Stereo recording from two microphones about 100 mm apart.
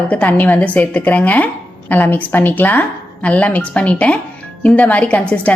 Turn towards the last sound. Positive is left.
turn(degrees=15)  # may be behind; listen again after turning